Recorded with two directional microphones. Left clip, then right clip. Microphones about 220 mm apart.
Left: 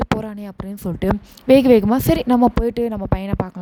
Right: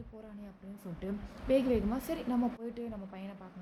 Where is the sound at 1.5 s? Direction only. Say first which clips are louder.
Left 18 dB; 50° left (ahead or behind).